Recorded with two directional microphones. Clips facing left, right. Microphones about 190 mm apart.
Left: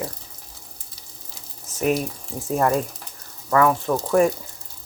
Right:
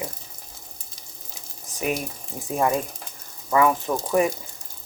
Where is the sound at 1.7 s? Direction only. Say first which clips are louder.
Left 4 dB; 15° right (ahead or behind).